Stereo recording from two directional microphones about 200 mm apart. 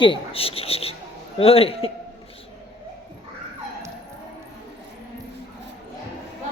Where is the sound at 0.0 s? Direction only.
25° left (ahead or behind).